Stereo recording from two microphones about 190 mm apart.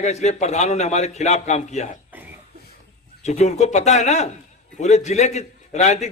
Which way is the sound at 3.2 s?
35° left (ahead or behind).